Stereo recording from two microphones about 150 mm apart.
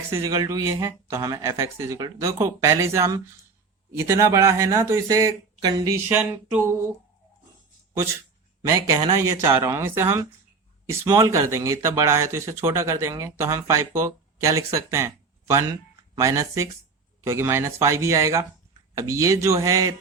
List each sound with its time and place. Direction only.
0.1 s speech: 20° right (ahead or behind)
9.2 s speech: 20° right (ahead or behind)